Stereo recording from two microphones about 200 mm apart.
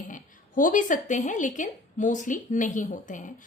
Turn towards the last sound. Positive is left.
turn(degrees=40)  # may be behind; listen again after turning